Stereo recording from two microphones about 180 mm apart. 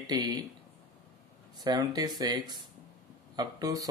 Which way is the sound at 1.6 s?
20° right (ahead or behind).